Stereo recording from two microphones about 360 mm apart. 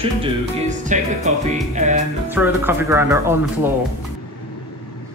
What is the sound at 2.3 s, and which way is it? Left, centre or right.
Speech, centre.